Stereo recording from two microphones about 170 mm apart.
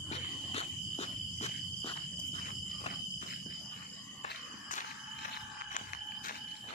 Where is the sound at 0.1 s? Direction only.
40° left (ahead or behind).